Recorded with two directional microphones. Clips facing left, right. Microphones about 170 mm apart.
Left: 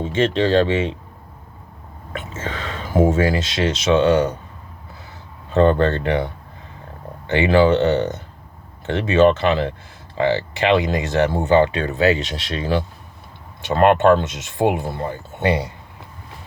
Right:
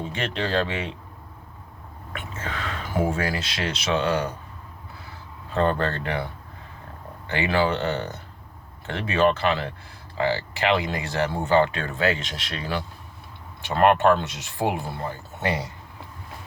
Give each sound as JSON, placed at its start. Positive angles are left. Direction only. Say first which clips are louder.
{"t": 0.0, "sound": "speech", "louder": "left 10 dB", "side_deg": 25}
{"t": 2.1, "sound": "a sound", "louder": "left 5 dB", "side_deg": 25}
{"t": 3.0, "sound": "speech", "louder": "left 9 dB", "side_deg": 25}
{"t": 5.5, "sound": "speech", "louder": "left 8 dB", "side_deg": 25}
{"t": 7.3, "sound": "speech", "louder": "left 8 dB", "side_deg": 25}